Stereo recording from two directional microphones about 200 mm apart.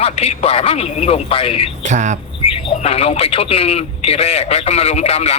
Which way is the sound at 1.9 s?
35° right (ahead or behind).